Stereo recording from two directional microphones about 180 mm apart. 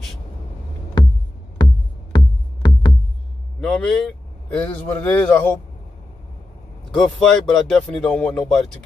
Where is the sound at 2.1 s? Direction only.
25° left (ahead or behind).